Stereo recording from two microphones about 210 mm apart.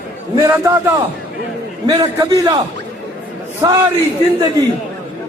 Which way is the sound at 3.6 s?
20° right (ahead or behind).